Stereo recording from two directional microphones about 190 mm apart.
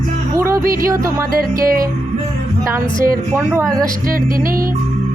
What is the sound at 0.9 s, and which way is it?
Speech, 15° right (ahead or behind).